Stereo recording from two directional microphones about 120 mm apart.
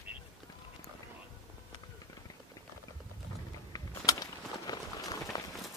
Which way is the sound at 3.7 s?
30° left (ahead or behind).